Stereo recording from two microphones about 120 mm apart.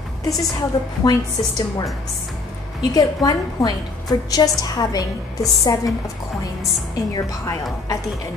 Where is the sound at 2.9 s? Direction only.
30° left (ahead or behind).